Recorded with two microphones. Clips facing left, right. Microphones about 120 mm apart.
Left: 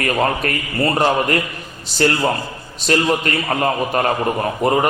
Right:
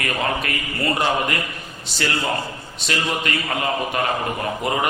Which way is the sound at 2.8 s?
40° left (ahead or behind).